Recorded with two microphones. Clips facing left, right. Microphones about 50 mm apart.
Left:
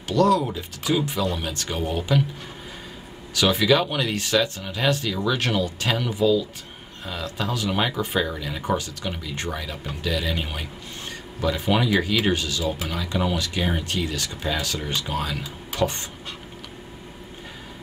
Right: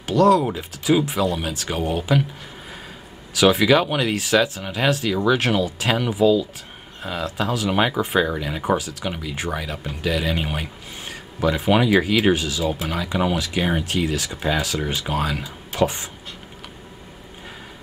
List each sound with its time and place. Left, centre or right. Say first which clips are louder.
0.0 s speech: right 3 dB; centre
3.3 s speech: right 4 dB; centre
7.7 s speech: right 5 dB; centre